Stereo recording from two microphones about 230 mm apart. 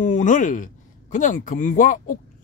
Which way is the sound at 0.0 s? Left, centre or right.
Left.